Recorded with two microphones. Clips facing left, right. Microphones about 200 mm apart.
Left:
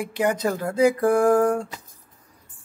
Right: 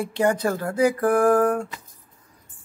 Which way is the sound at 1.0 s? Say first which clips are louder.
Right 2 dB; 10° left (ahead or behind).